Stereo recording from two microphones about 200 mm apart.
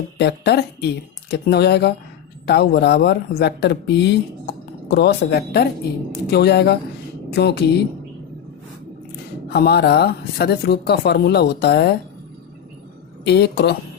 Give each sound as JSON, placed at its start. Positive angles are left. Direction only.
{"t": 0.2, "sound": "speech", "side_deg": 55}
{"t": 9.5, "sound": "speech", "side_deg": 55}
{"t": 13.2, "sound": "speech", "side_deg": 55}